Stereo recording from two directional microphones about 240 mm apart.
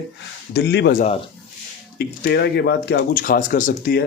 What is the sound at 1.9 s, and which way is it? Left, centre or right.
Speech, left.